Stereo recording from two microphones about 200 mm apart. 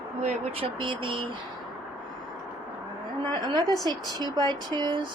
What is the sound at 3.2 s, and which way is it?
A woman's voice, 20° right (ahead or behind).